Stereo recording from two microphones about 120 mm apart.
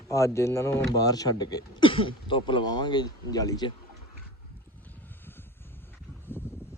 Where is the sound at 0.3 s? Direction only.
25° left (ahead or behind).